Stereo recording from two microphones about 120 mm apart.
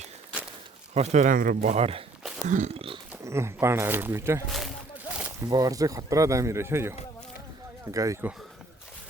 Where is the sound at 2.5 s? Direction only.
90° right.